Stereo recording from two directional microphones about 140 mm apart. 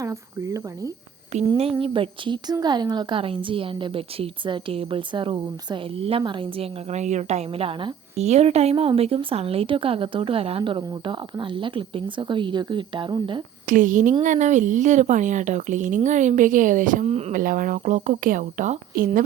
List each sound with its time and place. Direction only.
0.0 s speech: 20° right (ahead or behind)
1.3 s a woman's voice: 55° right (ahead or behind)
1.8 s a woman's voice: 40° right (ahead or behind)
8.1 s a woman's voice: 50° right (ahead or behind); by 13.4 s 30° right (ahead or behind)
13.7 s a woman's voice: 70° right (ahead or behind); by 17.3 s 50° right (ahead or behind)
17.3 s speech: 75° right (ahead or behind)